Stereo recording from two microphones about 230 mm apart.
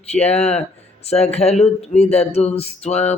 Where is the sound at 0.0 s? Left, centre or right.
Left.